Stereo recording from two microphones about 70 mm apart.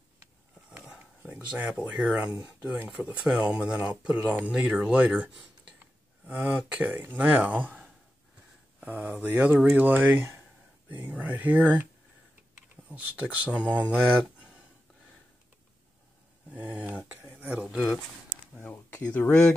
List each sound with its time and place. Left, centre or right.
0.7 s a sound: centre
1.5 s speech: centre
4.6 s speech: centre
12.9 s speech: right
13.5 s speech: left
16.4 s a sound: right
17.6 s speech: centre
18.6 s speech: left